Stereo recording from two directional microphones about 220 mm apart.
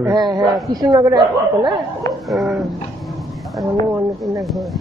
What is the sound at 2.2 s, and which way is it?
A man's voice, centre (ahead or behind).